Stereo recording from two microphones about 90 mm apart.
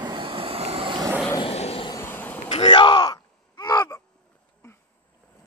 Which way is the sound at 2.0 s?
20° left (ahead or behind).